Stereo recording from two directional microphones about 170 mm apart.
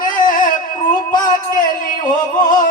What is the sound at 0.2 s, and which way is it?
Music, 50° left (ahead or behind).